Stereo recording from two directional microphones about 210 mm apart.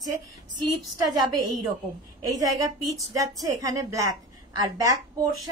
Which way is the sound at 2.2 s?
15° right (ahead or behind).